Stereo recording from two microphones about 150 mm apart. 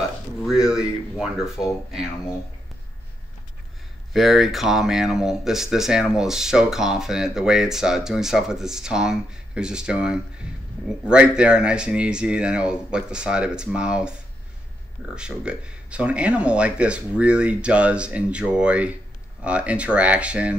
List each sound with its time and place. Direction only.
0.4 s a sound: 5° right (ahead or behind)
4.1 s speech: centre (ahead or behind)
15.1 s speech: 5° right (ahead or behind)